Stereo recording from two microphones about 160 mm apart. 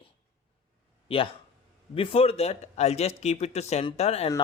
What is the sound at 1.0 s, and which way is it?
A man's voice, 35° left (ahead or behind).